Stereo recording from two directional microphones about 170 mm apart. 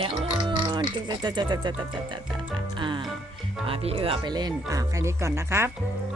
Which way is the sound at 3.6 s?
35° right (ahead or behind).